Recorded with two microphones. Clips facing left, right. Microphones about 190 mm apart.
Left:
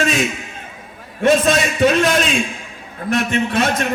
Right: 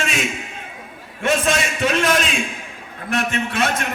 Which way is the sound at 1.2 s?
35° left (ahead or behind).